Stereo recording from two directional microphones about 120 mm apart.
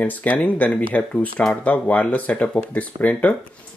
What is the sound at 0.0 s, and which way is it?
Speech, 15° left (ahead or behind).